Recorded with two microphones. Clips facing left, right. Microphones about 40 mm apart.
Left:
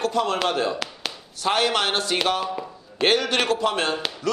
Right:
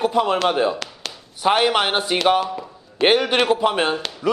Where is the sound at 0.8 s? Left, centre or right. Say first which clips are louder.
Left 1 dB; centre.